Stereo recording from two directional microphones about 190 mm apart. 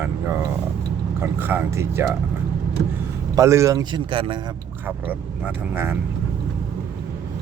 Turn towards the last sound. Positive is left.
turn(degrees=-10)  # may be behind; listen again after turning